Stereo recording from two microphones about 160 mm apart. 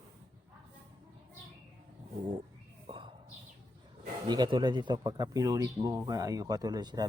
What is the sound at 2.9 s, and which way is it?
Whispering, 35° right (ahead or behind).